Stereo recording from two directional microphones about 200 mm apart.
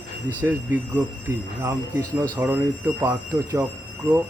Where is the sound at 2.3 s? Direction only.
10° right (ahead or behind).